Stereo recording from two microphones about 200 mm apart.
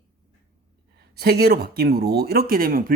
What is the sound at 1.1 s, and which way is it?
Speech, 50° right (ahead or behind).